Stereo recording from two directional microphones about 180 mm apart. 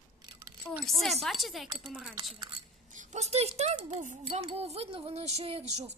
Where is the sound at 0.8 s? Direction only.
Centre (ahead or behind).